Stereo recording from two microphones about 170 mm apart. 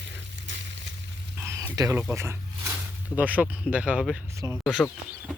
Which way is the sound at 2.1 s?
15° right (ahead or behind).